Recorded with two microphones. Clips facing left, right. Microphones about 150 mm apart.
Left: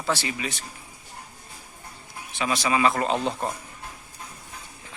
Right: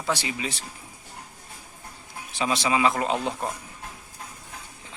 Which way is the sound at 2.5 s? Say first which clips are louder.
Even; 20° right (ahead or behind).